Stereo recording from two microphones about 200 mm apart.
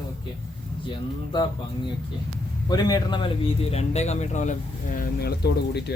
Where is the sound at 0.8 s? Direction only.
25° left (ahead or behind).